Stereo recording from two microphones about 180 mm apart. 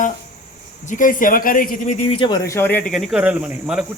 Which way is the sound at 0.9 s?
45° left (ahead or behind).